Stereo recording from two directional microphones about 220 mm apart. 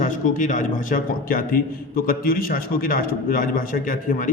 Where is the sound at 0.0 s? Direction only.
35° left (ahead or behind).